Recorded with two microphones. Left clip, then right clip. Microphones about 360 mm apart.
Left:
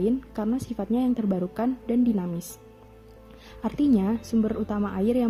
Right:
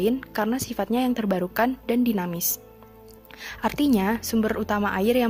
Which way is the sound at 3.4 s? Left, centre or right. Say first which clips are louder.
Right 2 dB; right.